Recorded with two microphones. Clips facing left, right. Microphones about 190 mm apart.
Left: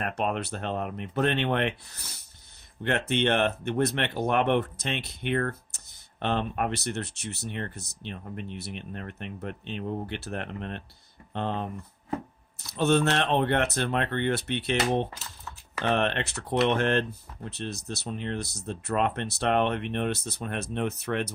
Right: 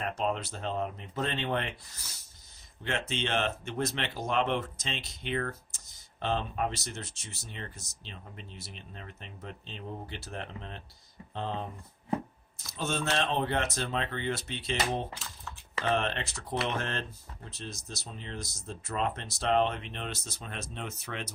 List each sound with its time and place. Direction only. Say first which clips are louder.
0.0 s speech: left 3 dB; 65° left (ahead or behind)